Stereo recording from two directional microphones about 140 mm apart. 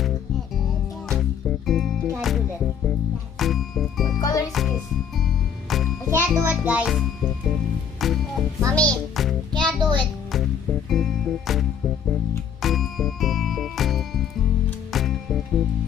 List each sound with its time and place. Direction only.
1.7 s music: centre (ahead or behind)
4.2 s music: 25° left (ahead or behind)
4.5 s music: centre (ahead or behind)
6.0 s music: 15° right (ahead or behind); by 9.3 s 5° left (ahead or behind)
9.5 s music: 30° right (ahead or behind)
10.3 s music: centre (ahead or behind)
12.6 s music: centre (ahead or behind)